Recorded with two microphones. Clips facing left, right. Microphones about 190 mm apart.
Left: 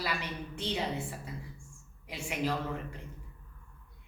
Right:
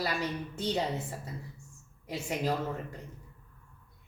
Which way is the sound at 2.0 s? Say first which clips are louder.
Right 2 dB; 40° right (ahead or behind).